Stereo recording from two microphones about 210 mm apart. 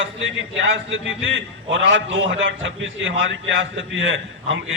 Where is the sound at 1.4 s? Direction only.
60° right (ahead or behind).